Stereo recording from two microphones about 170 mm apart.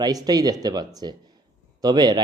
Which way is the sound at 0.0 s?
20° right (ahead or behind).